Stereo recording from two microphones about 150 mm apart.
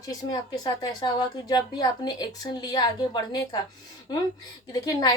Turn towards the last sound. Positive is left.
turn(degrees=25)  # may be behind; listen again after turning